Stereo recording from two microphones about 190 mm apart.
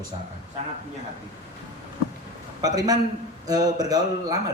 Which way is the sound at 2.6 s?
20° right (ahead or behind).